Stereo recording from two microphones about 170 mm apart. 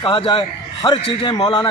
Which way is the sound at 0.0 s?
30° left (ahead or behind).